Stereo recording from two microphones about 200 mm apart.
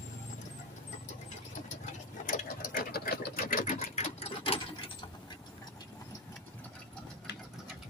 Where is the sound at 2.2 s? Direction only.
45° left (ahead or behind).